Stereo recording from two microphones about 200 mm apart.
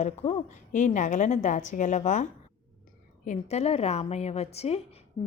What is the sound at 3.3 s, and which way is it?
A woman's voice, 35° left (ahead or behind).